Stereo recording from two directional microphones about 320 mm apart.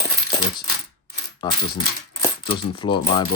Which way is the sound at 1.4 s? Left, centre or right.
Centre.